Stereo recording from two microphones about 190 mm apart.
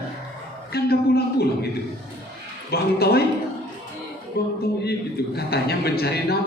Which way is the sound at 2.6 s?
55° left (ahead or behind).